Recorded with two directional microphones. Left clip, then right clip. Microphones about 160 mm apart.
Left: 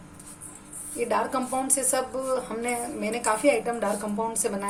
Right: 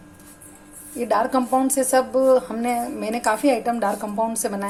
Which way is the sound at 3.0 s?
40° right (ahead or behind).